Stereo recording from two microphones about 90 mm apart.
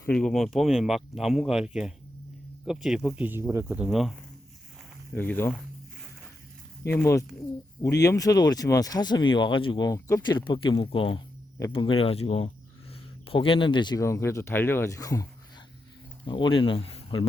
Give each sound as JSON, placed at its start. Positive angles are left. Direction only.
{"t": 0.1, "sound": "speech", "side_deg": 5}
{"t": 3.2, "sound": "speech", "side_deg": -20}
{"t": 3.5, "sound": "speech", "side_deg": -30}
{"t": 3.8, "sound": "speech", "side_deg": -5}
{"t": 5.1, "sound": "speech", "side_deg": 20}
{"t": 6.9, "sound": "speech", "side_deg": 30}
{"t": 9.8, "sound": "speech", "side_deg": 40}
{"t": 10.2, "sound": "speech", "side_deg": 60}
{"t": 14.0, "sound": "speech", "side_deg": 30}
{"t": 14.9, "sound": "speech", "side_deg": 40}
{"t": 16.2, "sound": "speech", "side_deg": 65}